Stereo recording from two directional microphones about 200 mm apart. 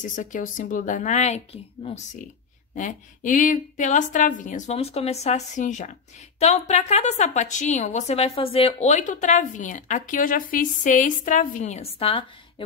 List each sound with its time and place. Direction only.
0.0 s a woman's voice: 40° left (ahead or behind)
2.7 s a woman's voice: 40° left (ahead or behind)